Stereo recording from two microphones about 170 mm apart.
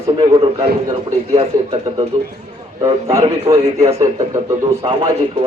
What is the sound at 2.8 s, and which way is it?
A man's voice, 20° right (ahead or behind).